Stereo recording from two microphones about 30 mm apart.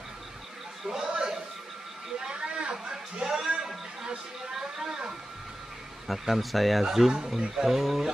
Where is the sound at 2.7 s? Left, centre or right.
Right.